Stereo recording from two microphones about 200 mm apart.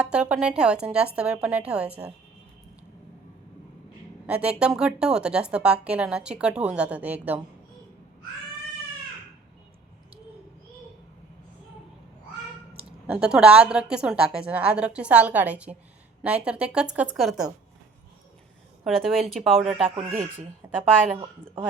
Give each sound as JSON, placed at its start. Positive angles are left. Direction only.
{"t": 0.0, "sound": "a woman's voice", "side_deg": -5}
{"t": 4.3, "sound": "a woman's voice", "side_deg": -5}
{"t": 13.1, "sound": "a woman's voice", "side_deg": -5}
{"t": 18.9, "sound": "a woman's voice", "side_deg": 0}
{"t": 19.7, "sound": "speech", "side_deg": -30}
{"t": 20.3, "sound": "speech", "side_deg": -10}